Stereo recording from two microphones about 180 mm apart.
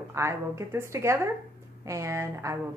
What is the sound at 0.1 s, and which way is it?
Speech, 15° right (ahead or behind).